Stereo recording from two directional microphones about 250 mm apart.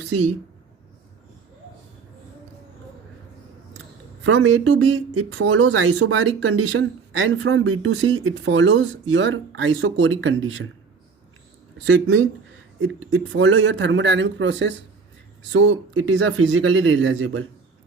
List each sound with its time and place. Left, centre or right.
4.2 s speech: right
11.9 s speech: right